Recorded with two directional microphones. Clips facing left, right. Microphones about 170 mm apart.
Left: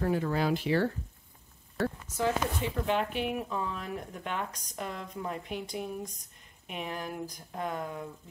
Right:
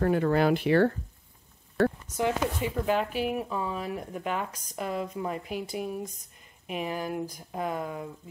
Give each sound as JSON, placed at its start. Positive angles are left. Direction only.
{"t": 0.0, "sound": "speech", "side_deg": -60}
{"t": 2.1, "sound": "speech", "side_deg": -15}
{"t": 2.9, "sound": "speech", "side_deg": -5}